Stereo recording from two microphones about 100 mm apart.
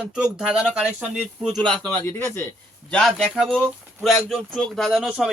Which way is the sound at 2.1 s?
25° left (ahead or behind).